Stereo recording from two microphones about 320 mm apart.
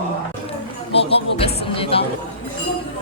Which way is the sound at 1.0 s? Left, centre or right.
Centre.